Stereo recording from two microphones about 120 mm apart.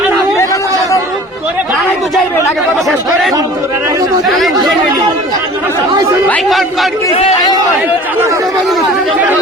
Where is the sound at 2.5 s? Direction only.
Centre (ahead or behind).